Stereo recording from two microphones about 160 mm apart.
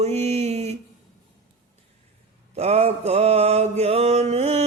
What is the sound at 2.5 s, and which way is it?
Mantra, 40° right (ahead or behind).